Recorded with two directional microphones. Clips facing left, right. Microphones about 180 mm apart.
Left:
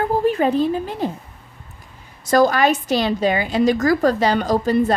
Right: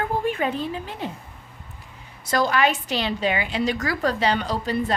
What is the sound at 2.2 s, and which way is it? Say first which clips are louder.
A woman's voice: left 6 dB; 45° left (ahead or behind).